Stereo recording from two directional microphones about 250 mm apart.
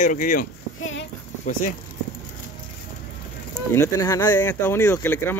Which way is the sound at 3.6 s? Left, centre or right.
Centre.